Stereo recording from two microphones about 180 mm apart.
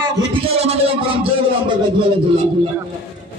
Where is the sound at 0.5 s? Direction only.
35° right (ahead or behind).